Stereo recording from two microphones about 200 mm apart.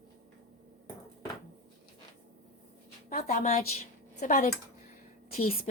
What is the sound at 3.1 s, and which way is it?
A woman's voice, 35° left (ahead or behind).